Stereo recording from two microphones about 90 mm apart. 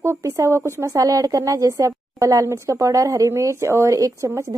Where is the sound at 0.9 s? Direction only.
40° right (ahead or behind).